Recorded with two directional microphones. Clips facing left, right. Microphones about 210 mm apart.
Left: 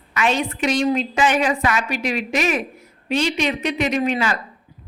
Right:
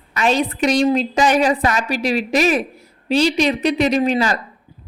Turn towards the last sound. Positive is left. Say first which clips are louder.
# right 4 dB
turn(degrees=-35)  # may be behind; listen again after turning